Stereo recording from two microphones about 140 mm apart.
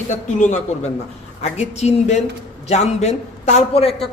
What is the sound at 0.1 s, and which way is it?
A man's voice, 60° left (ahead or behind).